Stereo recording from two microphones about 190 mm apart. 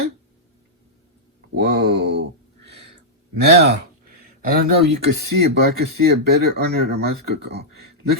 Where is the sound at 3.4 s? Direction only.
60° right (ahead or behind).